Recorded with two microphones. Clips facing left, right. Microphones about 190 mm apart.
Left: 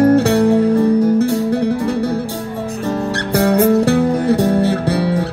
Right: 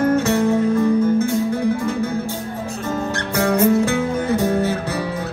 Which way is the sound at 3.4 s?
35° left (ahead or behind).